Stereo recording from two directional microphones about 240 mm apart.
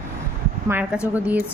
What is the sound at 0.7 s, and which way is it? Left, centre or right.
Speech, centre.